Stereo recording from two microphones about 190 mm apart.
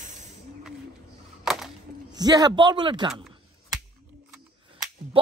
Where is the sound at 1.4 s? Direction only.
Centre (ahead or behind).